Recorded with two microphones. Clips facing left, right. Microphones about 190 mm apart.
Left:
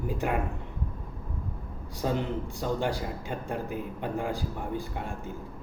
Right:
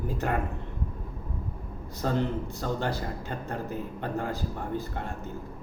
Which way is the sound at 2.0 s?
10° left (ahead or behind).